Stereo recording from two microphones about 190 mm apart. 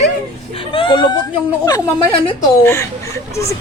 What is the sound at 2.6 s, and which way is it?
Speech, 10° left (ahead or behind).